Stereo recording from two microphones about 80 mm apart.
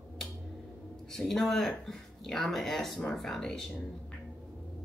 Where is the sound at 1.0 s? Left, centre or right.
Centre.